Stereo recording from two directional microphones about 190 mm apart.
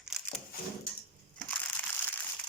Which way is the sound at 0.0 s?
Centre (ahead or behind).